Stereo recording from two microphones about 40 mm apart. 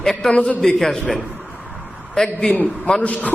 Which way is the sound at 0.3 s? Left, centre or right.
Left.